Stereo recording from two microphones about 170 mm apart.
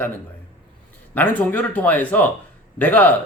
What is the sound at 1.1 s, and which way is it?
Speech, 10° left (ahead or behind).